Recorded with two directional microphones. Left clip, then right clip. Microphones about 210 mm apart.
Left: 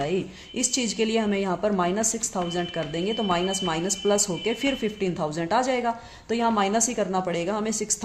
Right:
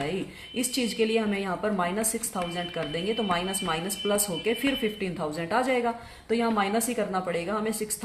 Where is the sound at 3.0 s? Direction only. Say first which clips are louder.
Left 3 dB; 45° left (ahead or behind).